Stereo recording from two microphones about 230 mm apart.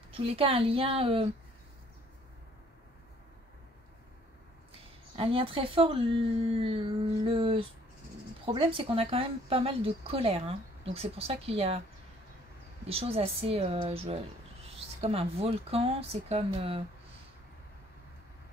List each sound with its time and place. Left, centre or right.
0.1 s speech: right
5.1 s speech: right
12.8 s speech: right